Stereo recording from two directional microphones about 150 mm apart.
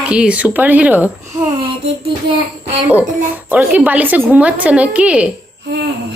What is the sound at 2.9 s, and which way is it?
A woman's voice, 10° right (ahead or behind).